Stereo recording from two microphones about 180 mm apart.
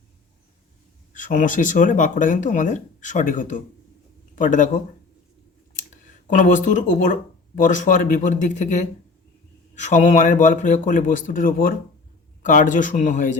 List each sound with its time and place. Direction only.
1.1 s speech: 45° left (ahead or behind)
5.9 s speech: 45° left (ahead or behind)